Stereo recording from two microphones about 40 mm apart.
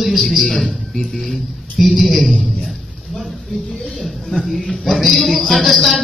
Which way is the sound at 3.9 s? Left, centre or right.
Centre.